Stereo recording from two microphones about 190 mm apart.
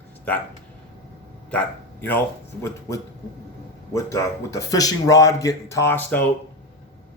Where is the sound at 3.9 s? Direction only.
15° left (ahead or behind).